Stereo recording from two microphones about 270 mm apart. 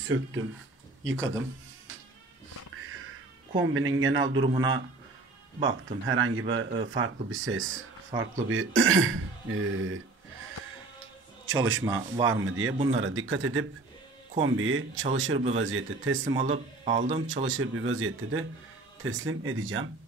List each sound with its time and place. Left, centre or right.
0.0 s speech: right
3.5 s speech: right
11.8 s speech: centre
12.3 s speech: right
16.5 s a man's voice: right
17.5 s speech: right